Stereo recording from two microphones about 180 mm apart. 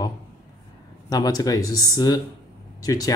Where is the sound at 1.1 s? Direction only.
20° left (ahead or behind).